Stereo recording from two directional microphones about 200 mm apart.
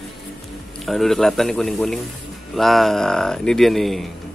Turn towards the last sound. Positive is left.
turn(degrees=0)  # may be behind; listen again after turning